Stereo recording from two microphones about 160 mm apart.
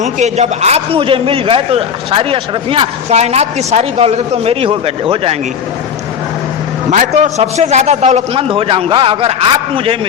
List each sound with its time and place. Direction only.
0.0 s a man's voice: 45° right (ahead or behind)
6.9 s a man's voice: 45° right (ahead or behind)